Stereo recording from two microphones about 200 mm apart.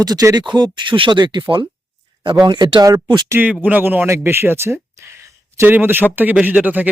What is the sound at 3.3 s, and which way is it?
Speech, 5° right (ahead or behind).